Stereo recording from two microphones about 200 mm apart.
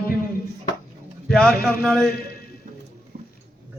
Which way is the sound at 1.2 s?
Centre (ahead or behind).